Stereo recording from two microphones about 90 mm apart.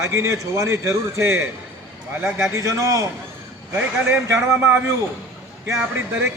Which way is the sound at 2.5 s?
35° right (ahead or behind).